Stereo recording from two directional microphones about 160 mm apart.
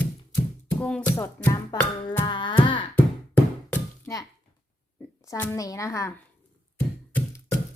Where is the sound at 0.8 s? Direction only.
10° left (ahead or behind).